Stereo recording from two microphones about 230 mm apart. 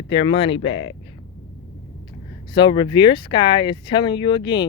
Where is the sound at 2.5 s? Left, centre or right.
Centre.